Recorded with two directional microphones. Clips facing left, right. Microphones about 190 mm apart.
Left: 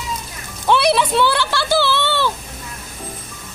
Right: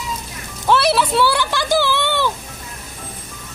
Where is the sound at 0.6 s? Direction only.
5° right (ahead or behind).